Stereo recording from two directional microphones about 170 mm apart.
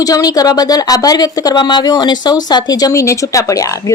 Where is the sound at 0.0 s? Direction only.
20° left (ahead or behind).